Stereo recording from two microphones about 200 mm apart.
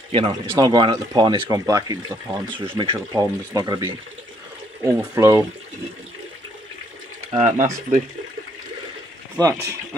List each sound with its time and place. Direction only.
0.1 s speech: 25° right (ahead or behind)
7.3 s speech: 35° right (ahead or behind)
9.4 s speech: 15° right (ahead or behind)